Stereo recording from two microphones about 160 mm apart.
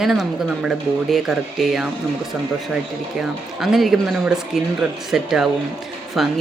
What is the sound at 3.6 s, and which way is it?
A woman's voice, centre (ahead or behind).